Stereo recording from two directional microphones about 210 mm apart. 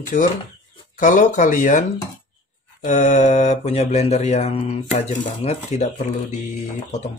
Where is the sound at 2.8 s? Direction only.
35° left (ahead or behind).